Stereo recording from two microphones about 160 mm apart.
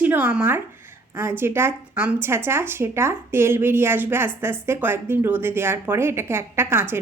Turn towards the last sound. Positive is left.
turn(degrees=-15)  # may be behind; listen again after turning